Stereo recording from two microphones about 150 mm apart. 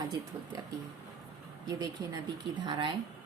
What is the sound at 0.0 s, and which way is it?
Speech, 25° right (ahead or behind).